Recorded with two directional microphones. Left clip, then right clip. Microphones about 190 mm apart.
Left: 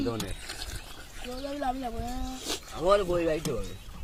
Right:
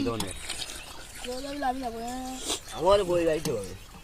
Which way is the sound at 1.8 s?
25° left (ahead or behind).